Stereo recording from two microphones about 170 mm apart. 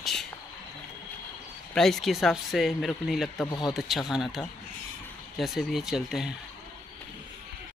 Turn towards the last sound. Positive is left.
turn(degrees=-5)  # may be behind; listen again after turning